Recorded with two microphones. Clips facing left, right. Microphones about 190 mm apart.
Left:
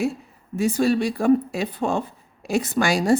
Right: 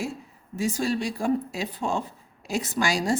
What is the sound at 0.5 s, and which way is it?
A woman's voice, 60° left (ahead or behind).